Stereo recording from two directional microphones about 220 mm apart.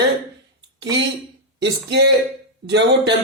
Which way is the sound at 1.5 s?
50° right (ahead or behind).